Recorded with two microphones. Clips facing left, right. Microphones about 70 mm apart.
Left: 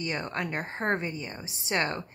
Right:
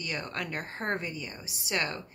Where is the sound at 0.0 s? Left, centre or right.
Left.